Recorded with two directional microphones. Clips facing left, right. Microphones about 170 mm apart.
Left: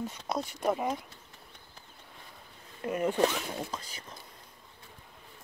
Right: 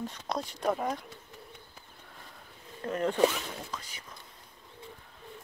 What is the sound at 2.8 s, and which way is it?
Speech, 10° left (ahead or behind).